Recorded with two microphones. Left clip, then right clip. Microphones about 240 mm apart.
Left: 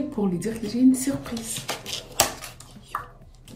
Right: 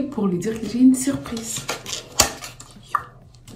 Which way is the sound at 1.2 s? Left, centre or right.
Right.